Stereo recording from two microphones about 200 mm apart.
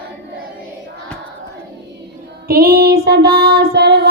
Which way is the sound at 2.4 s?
50° right (ahead or behind).